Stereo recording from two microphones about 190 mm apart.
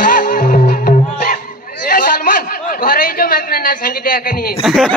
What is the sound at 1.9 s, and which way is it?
Chatter, 50° left (ahead or behind).